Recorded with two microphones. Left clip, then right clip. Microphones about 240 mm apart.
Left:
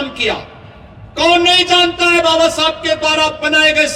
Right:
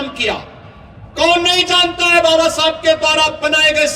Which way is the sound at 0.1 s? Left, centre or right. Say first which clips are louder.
Even; right.